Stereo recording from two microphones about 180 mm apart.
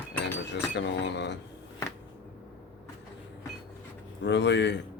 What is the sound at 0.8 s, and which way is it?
Speech, 75° left (ahead or behind).